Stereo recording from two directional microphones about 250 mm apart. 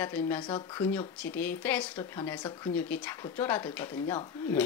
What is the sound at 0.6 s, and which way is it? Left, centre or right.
Speech, centre.